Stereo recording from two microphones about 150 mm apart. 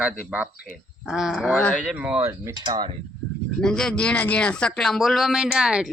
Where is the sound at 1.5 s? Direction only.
10° left (ahead or behind).